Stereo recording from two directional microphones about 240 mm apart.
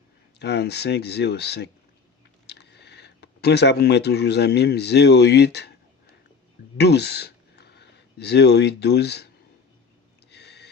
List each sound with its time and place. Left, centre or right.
0.3 s speech: left
6.7 s speech: left
10.3 s a sound: left